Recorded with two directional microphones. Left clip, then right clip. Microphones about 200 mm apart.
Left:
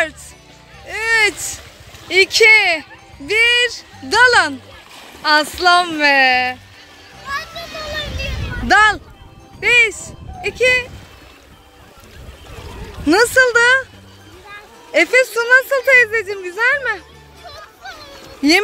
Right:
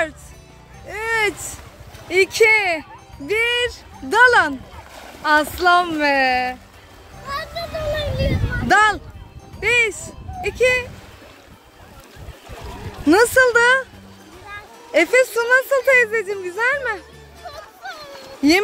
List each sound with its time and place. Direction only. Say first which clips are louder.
0.8 s a sound: left 5 dB; 5° right (ahead or behind)
2.0 s speech: left 4 dB; 5° right (ahead or behind)
8.6 s speech: left 3 dB; 5° right (ahead or behind)
13.0 s speech: left 1 dB; 5° right (ahead or behind)
14.9 s speech: left 2 dB; 5° right (ahead or behind)
18.4 s speech: left 2 dB; centre (ahead or behind)